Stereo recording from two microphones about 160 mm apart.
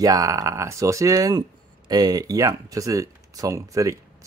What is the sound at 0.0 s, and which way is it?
Speech, 20° right (ahead or behind).